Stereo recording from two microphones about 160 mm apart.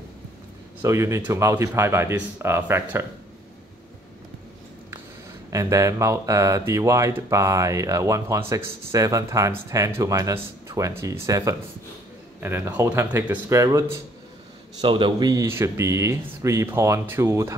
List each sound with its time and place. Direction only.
0.8 s speech: 20° right (ahead or behind)
5.5 s speech: 20° right (ahead or behind)